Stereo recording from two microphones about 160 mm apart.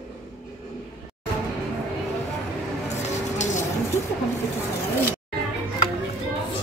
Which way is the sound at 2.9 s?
50° left (ahead or behind).